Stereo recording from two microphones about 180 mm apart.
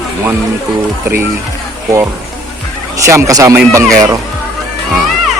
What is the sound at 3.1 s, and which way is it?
Speech, 15° right (ahead or behind).